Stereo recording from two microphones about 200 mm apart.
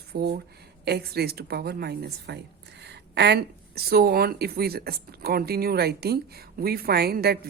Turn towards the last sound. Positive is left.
turn(degrees=-50)  # may be behind; listen again after turning